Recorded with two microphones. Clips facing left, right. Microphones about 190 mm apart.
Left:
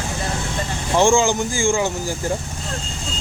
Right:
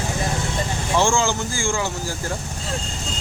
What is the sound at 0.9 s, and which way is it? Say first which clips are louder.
Speech: left 4 dB; 15° left (ahead or behind).